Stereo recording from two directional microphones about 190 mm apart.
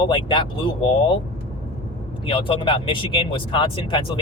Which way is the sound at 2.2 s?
30° left (ahead or behind).